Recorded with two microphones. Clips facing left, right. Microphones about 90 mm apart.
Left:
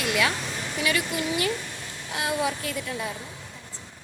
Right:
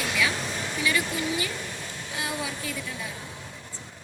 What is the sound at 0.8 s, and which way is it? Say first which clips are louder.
Speech: left 1 dB; 70° left (ahead or behind).